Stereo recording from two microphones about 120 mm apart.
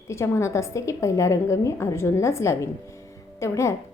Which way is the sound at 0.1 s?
25° left (ahead or behind).